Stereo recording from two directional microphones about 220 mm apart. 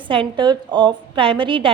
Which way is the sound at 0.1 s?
20° right (ahead or behind).